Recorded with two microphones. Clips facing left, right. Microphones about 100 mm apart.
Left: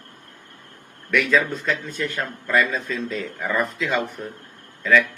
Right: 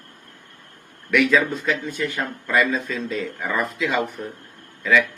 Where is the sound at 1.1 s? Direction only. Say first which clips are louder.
Right 2 dB; 5° right (ahead or behind).